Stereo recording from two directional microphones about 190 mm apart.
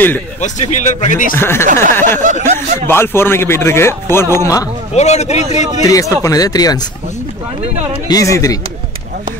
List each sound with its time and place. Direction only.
0.4 s speech: 40° left (ahead or behind)
1.3 s speech: 10° left (ahead or behind)
2.4 s speech: 40° right (ahead or behind)
2.9 s speech: 10° left (ahead or behind)
4.9 s speech: 35° left (ahead or behind)
5.9 s speech: 15° left (ahead or behind)
8.1 s speech: 15° left (ahead or behind)